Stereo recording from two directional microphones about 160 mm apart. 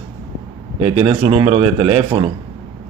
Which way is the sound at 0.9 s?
35° right (ahead or behind).